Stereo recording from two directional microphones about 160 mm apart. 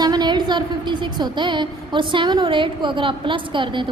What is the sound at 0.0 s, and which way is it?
A woman's voice, 25° right (ahead or behind).